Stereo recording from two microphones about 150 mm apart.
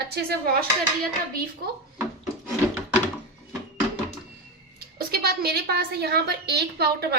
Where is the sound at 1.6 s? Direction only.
90° right.